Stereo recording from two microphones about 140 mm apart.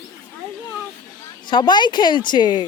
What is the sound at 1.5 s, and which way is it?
Speech, 30° left (ahead or behind).